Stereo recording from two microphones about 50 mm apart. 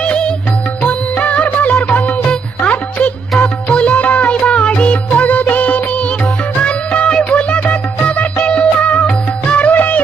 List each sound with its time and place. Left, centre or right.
0.0 s music: left